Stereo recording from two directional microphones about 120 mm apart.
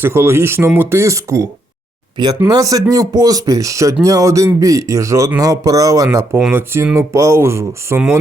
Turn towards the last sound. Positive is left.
turn(degrees=-20)  # may be behind; listen again after turning